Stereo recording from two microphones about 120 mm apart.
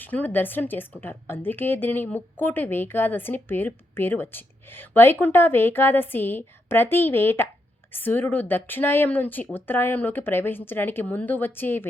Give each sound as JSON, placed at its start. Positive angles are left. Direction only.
{"t": 0.0, "sound": "a woman's voice", "side_deg": 15}